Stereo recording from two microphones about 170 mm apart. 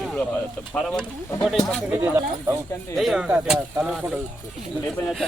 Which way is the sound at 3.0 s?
Centre (ahead or behind).